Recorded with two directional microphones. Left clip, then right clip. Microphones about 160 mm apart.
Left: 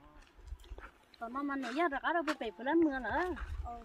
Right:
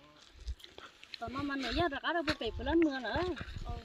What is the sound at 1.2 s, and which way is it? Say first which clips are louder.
Speech: right 1 dB; 15° right (ahead or behind).